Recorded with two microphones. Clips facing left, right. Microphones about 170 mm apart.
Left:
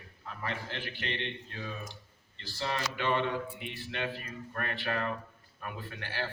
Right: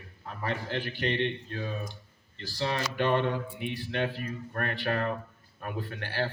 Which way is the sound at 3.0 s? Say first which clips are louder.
Right 4 dB; 50° right (ahead or behind).